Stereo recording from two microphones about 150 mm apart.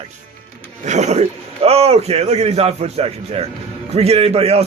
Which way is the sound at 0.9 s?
50° right (ahead or behind).